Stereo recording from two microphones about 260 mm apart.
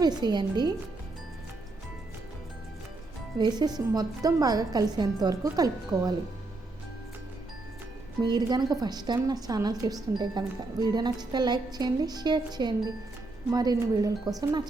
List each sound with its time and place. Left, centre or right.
0.0 s a woman's voice: centre
3.3 s a woman's voice: centre
8.2 s a woman's voice: centre